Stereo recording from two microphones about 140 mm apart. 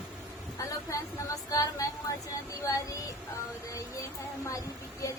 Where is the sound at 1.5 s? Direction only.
25° left (ahead or behind).